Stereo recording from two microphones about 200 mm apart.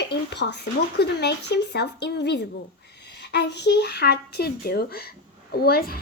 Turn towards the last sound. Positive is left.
turn(degrees=50)  # may be behind; listen again after turning